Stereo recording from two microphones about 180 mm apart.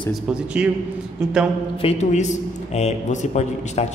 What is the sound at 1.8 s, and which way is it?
A man's voice, 35° left (ahead or behind).